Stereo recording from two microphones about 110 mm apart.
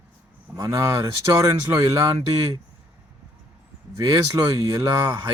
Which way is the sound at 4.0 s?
30° right (ahead or behind).